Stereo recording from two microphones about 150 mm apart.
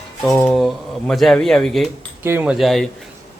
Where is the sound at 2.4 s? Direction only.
Centre (ahead or behind).